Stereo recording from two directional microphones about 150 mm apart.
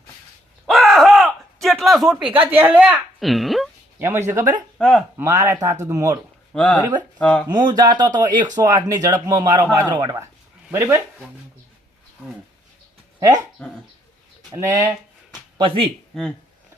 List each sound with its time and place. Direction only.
0.7 s a sound: centre (ahead or behind)
3.9 s speech: 15° right (ahead or behind)
4.8 s speech: 5° left (ahead or behind)
5.1 s speech: 15° right (ahead or behind)
6.5 s speech: 10° left (ahead or behind)
7.5 s speech: 30° right (ahead or behind)
13.1 s speech: 30° right (ahead or behind)
14.5 s speech: 20° right (ahead or behind); by 15.9 s 35° right (ahead or behind)
16.1 s speech: 5° left (ahead or behind)